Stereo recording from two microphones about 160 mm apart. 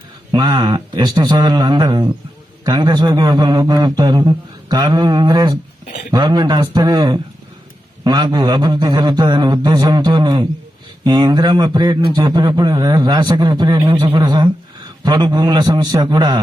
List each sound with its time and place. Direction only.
0.3 s a man's voice: 25° right (ahead or behind)